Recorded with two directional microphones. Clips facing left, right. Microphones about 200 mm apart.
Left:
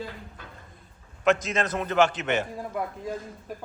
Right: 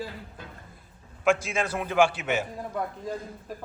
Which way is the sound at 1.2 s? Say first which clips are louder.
Left 1 dB; 10° right (ahead or behind).